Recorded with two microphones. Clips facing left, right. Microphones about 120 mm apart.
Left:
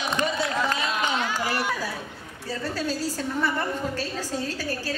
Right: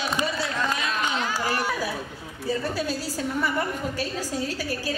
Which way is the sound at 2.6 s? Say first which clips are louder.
Right 1 dB; 10° right (ahead or behind).